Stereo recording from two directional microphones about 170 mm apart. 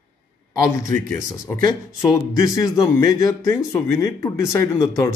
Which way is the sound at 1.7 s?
20° left (ahead or behind).